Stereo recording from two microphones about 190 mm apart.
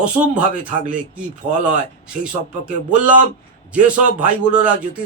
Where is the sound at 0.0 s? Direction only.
5° right (ahead or behind).